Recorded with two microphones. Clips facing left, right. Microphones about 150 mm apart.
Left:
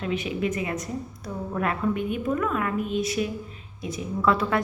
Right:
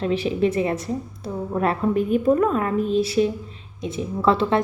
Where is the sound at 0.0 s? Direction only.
35° right (ahead or behind).